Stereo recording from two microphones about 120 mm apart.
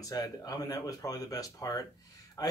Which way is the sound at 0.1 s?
35° left (ahead or behind).